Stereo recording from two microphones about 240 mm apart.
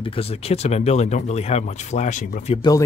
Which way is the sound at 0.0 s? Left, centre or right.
Left.